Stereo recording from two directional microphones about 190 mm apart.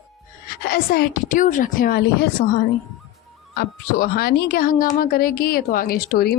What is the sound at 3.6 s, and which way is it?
Speech, 55° left (ahead or behind).